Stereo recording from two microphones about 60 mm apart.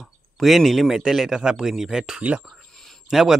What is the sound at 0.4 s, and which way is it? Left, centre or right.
Speech, centre.